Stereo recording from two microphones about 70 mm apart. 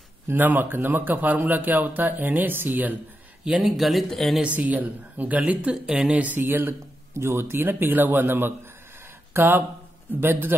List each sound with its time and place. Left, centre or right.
0.3 s a man's voice: right
3.6 s speech: centre
4.6 s a man's voice: right
6.4 s a man's voice: right